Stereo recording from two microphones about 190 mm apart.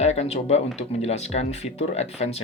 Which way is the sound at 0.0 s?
35° left (ahead or behind).